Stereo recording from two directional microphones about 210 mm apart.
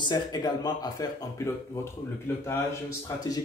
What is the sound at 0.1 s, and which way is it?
Speech, 20° left (ahead or behind).